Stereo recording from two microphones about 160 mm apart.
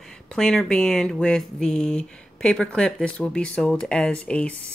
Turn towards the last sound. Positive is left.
turn(degrees=5)  # may be behind; listen again after turning